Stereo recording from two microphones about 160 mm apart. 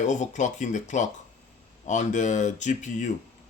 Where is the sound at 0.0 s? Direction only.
50° left (ahead or behind).